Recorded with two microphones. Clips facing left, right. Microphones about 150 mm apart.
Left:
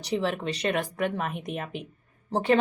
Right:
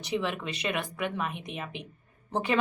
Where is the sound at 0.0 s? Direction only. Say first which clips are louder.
Left 3 dB; 35° left (ahead or behind).